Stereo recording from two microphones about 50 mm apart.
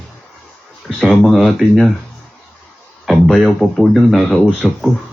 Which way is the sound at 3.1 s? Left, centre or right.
Centre.